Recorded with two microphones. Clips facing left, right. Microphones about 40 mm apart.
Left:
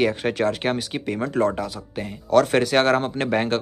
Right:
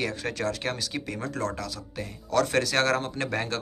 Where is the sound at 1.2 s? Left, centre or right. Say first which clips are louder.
Left 11 dB; left.